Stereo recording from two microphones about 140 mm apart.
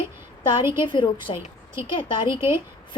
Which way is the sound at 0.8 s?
35° left (ahead or behind).